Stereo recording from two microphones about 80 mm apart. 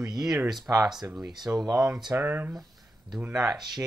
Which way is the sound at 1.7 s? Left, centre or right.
Right.